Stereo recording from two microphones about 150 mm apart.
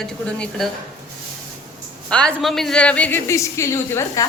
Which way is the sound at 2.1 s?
5° left (ahead or behind).